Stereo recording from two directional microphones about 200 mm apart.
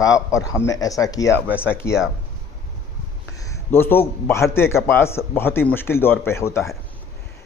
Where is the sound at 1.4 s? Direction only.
5° right (ahead or behind).